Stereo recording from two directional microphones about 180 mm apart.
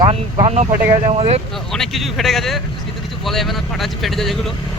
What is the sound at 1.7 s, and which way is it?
Speech, centre (ahead or behind).